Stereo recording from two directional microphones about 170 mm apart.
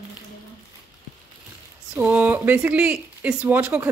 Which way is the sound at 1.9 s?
10° right (ahead or behind).